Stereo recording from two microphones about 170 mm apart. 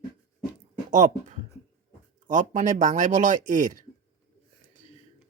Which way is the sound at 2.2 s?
45° right (ahead or behind).